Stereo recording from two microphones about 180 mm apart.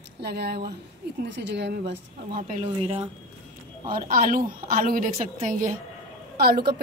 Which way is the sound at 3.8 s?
50° right (ahead or behind).